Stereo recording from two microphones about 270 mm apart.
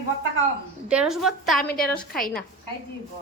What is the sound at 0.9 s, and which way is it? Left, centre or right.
A woman's voice, centre.